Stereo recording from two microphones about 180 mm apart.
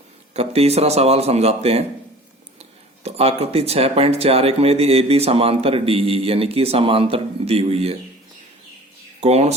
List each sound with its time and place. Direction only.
0.3 s speech: 35° right (ahead or behind)
9.2 s speech: 35° right (ahead or behind)